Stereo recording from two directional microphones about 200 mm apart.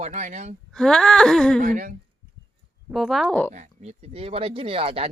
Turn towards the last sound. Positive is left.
turn(degrees=-30)  # may be behind; listen again after turning